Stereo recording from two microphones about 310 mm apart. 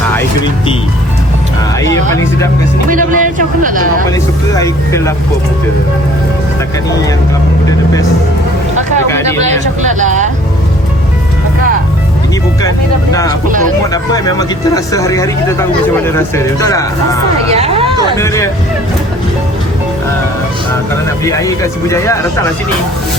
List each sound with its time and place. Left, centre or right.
2.9 s a man's voice: right
4.5 s speech: centre
9.1 s speech: centre
9.4 s speech: right
12.6 s speech: centre
17.5 s a sound: centre
18.2 s speech: centre
21.2 s speech: centre